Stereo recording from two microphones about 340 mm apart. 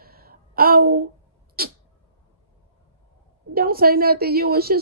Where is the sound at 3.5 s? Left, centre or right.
Right.